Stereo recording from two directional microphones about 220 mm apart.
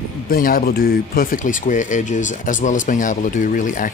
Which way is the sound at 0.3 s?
40° left (ahead or behind).